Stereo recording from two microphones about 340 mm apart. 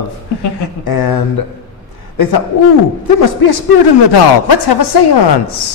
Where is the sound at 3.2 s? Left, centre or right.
Left.